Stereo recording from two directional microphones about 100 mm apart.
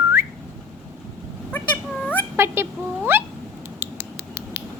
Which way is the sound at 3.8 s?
25° right (ahead or behind).